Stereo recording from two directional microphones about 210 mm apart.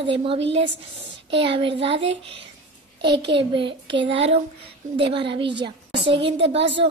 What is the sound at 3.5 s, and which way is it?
Speech, 25° right (ahead or behind).